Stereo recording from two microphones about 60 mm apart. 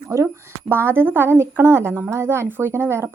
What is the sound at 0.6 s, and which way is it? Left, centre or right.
A woman's voice, right.